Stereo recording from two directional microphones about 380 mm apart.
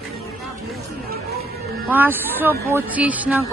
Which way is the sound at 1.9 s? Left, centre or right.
Centre.